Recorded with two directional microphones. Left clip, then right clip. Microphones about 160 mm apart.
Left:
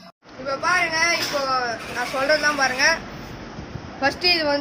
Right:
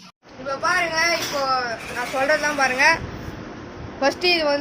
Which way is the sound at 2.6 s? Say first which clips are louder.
Right 2 dB; 35° right (ahead or behind).